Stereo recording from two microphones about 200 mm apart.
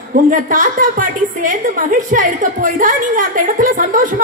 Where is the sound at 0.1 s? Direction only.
40° right (ahead or behind).